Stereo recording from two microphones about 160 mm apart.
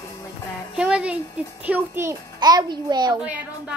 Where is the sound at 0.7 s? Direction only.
5° right (ahead or behind); by 3.1 s 25° right (ahead or behind).